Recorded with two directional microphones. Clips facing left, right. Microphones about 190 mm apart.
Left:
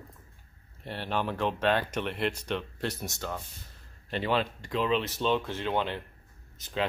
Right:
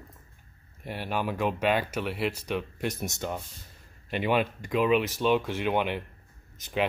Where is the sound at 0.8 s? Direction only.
10° right (ahead or behind).